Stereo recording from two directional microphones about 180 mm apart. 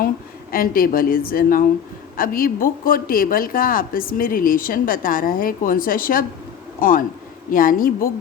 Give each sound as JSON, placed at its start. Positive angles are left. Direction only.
{"t": 0.5, "sound": "speech", "side_deg": 50}